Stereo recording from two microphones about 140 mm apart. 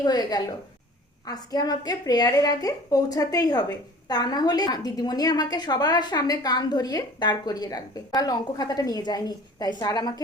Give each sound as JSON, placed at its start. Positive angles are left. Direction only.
{"t": 0.0, "sound": "a woman's voice", "side_deg": 30}